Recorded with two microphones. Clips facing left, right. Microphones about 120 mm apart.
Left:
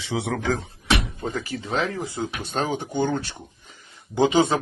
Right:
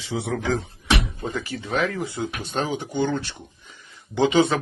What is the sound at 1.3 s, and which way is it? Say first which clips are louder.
Speech: left 1 dB; 40° left (ahead or behind).